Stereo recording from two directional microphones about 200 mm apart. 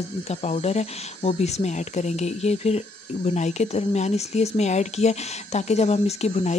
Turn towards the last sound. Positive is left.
turn(degrees=35)  # may be behind; listen again after turning